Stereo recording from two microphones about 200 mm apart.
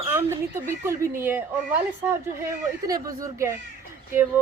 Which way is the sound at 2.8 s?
15° right (ahead or behind).